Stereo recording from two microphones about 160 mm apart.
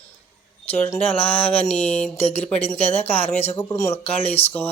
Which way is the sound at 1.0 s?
35° left (ahead or behind).